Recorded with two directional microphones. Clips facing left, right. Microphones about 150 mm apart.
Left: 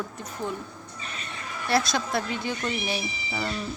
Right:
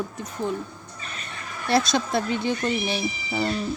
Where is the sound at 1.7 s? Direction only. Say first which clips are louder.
Right 3 dB; 20° right (ahead or behind).